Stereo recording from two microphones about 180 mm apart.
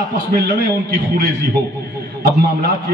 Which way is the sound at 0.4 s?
60° right (ahead or behind).